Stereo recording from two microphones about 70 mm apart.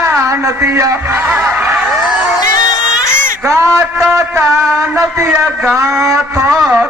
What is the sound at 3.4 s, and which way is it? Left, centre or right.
A man's voice, right.